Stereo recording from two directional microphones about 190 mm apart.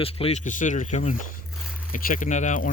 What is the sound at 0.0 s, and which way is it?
Speech, 30° left (ahead or behind).